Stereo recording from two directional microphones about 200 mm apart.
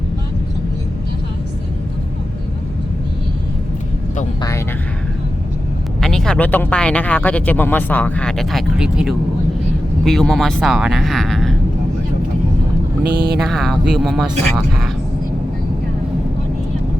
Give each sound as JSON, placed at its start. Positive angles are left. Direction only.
{"t": 6.0, "sound": "speech", "side_deg": 5}
{"t": 13.1, "sound": "a sound", "side_deg": -55}
{"t": 13.4, "sound": "speech", "side_deg": 0}